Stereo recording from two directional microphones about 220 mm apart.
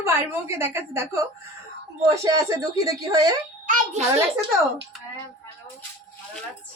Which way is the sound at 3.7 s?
30° right (ahead or behind).